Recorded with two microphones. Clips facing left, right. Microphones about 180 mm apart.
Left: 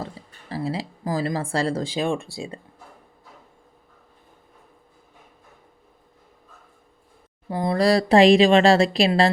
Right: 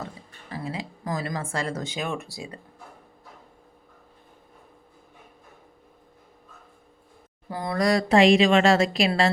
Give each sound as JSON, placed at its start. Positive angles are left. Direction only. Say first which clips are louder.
{"t": 0.0, "sound": "speech", "louder": "left 3 dB", "side_deg": 35}
{"t": 7.5, "sound": "a woman's voice", "louder": "left 4 dB", "side_deg": 25}